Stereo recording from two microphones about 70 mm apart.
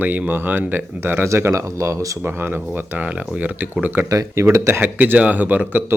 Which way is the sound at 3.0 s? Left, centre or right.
Right.